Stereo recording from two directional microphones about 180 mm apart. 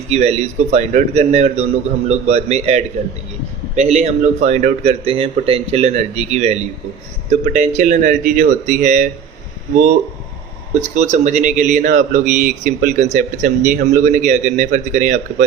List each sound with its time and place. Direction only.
0.1 s a man's voice: 35° right (ahead or behind)
10.8 s speech: 40° right (ahead or behind)